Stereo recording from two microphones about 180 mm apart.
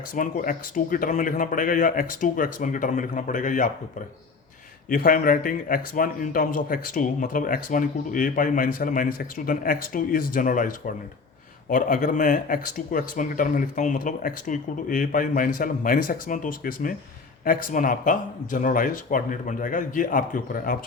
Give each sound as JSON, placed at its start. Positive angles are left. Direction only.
{"t": 0.1, "sound": "a man's voice", "side_deg": 50}
{"t": 4.9, "sound": "a man's voice", "side_deg": 55}